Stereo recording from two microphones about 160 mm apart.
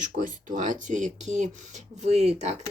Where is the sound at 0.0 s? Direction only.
55° right (ahead or behind).